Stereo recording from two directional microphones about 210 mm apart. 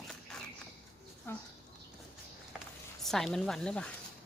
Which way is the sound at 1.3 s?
10° left (ahead or behind).